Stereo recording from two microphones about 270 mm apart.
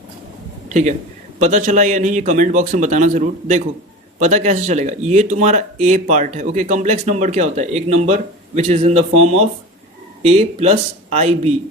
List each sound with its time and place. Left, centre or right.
0.7 s a man's voice: right